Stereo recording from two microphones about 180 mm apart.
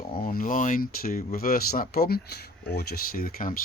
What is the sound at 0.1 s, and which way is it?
Speech, 50° left (ahead or behind).